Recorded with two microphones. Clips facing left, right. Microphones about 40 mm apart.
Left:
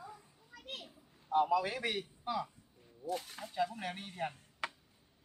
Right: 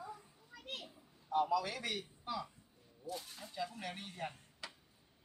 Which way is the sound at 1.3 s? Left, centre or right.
Left.